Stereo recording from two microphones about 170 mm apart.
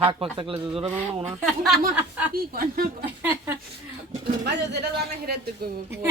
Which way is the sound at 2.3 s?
60° right (ahead or behind).